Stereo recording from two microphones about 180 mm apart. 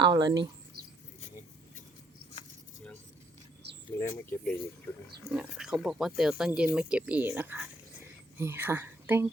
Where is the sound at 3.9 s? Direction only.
10° left (ahead or behind).